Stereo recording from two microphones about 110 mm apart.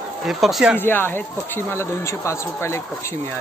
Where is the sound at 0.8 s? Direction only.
20° left (ahead or behind).